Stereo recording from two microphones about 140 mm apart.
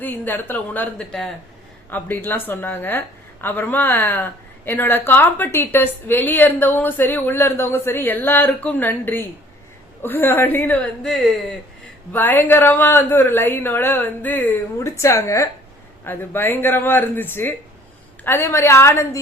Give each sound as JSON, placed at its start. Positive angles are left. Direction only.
{"t": 0.0, "sound": "speech", "side_deg": 15}
{"t": 11.1, "sound": "speech", "side_deg": 0}
{"t": 12.1, "sound": "a woman's voice", "side_deg": 15}